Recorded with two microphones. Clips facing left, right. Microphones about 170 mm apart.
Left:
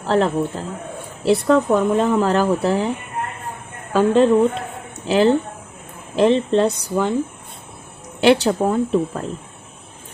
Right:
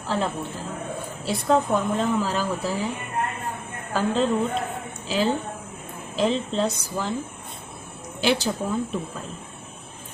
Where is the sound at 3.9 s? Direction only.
60° left (ahead or behind).